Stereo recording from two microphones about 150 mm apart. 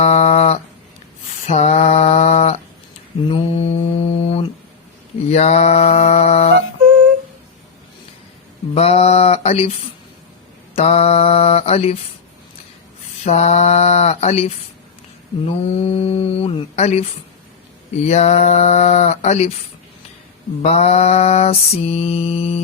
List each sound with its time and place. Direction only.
0.0 s a sound: 45° left (ahead or behind)
1.5 s mantra: 45° left (ahead or behind)
8.7 s mantra: 45° left (ahead or behind)
10.8 s mantra: 45° left (ahead or behind)
13.2 s mantra: 50° left (ahead or behind)
20.6 s mantra: 45° left (ahead or behind)